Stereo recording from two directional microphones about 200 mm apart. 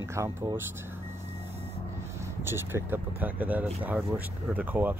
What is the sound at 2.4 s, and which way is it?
Speech, 10° right (ahead or behind).